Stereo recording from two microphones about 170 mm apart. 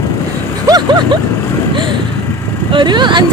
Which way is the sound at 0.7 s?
25° right (ahead or behind).